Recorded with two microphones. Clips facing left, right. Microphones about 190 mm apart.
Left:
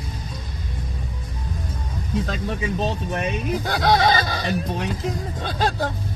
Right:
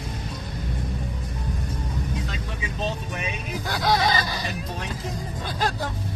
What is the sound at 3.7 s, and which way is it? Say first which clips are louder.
Speech: left 4 dB; 20° left (ahead or behind).